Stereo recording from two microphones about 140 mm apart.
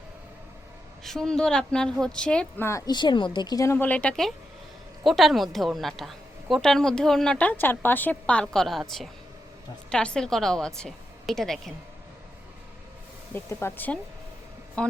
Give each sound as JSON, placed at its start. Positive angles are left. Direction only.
{"t": 1.0, "sound": "a woman's voice", "side_deg": 5}
{"t": 2.6, "sound": "a woman's voice", "side_deg": 25}
{"t": 13.3, "sound": "speech", "side_deg": 15}